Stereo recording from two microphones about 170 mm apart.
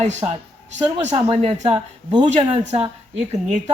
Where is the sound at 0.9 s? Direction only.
35° right (ahead or behind).